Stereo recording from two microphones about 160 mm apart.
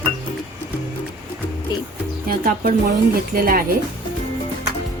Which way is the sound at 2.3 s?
65° right (ahead or behind).